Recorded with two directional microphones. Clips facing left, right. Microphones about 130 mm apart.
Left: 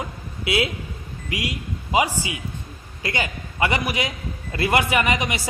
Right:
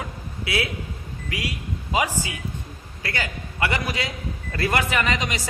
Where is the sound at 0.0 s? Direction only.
20° left (ahead or behind).